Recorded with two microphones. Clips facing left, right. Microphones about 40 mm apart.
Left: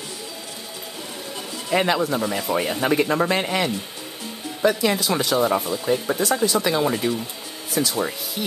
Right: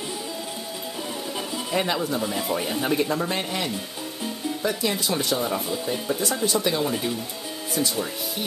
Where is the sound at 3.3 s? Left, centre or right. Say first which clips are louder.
Left 5 dB; left.